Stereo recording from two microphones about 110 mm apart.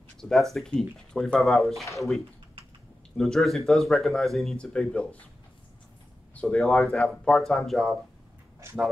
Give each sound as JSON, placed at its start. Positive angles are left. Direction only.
{"t": 0.2, "sound": "speech", "side_deg": 0}
{"t": 6.4, "sound": "speech", "side_deg": 5}
{"t": 8.6, "sound": "speech", "side_deg": -25}